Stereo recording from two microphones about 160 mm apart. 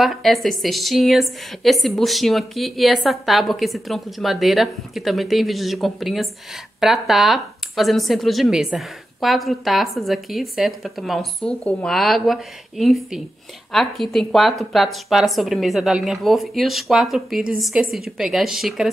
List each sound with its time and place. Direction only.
0.0 s speech: centre (ahead or behind)